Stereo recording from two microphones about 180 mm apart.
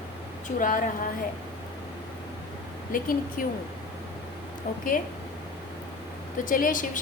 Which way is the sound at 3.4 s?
50° left (ahead or behind).